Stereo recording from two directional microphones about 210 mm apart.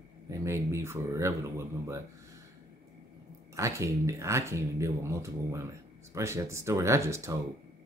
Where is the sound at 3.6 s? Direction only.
15° right (ahead or behind).